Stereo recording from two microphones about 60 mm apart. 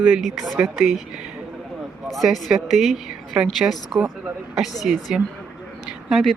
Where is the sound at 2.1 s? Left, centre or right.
Centre.